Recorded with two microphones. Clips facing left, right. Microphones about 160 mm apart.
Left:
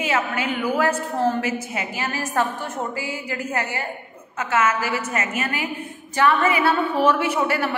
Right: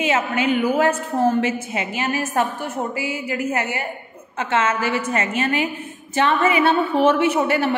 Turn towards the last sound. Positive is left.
turn(degrees=-20)  # may be behind; listen again after turning